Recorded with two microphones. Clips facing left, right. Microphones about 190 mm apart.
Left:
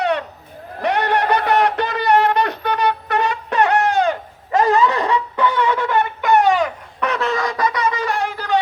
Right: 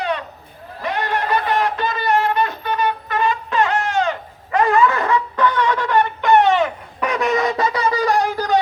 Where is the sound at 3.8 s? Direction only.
35° left (ahead or behind).